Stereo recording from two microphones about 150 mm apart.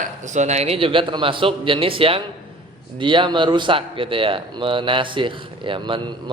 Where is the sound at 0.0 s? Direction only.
55° right (ahead or behind).